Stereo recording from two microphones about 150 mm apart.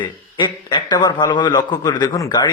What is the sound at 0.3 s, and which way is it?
A man's voice, 30° left (ahead or behind).